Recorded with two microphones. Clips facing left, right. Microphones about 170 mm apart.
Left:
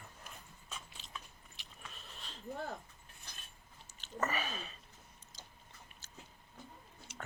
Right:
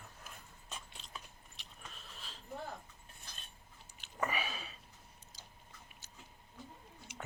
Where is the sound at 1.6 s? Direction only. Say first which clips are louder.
Even; centre (ahead or behind).